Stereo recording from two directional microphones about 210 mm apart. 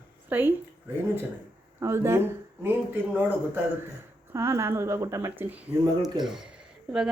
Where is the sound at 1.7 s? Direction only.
10° right (ahead or behind).